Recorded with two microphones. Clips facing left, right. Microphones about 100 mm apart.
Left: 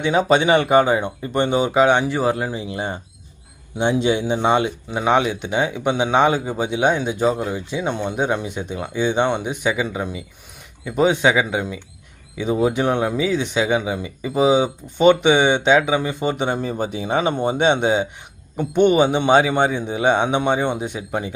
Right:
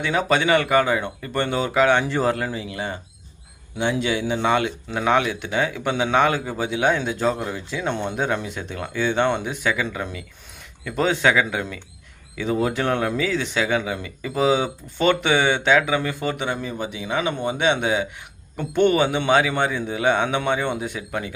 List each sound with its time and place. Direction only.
0.0 s speech: 25° left (ahead or behind)